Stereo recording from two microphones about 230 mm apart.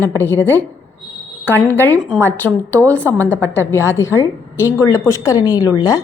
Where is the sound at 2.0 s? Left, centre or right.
Centre.